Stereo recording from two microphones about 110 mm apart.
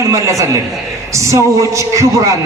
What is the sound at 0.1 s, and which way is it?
A man's voice, 30° right (ahead or behind).